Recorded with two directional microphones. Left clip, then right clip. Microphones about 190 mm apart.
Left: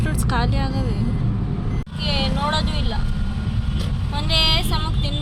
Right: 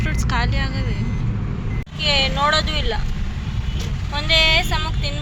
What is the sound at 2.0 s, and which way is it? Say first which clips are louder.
Speech: right 6 dB; centre (ahead or behind).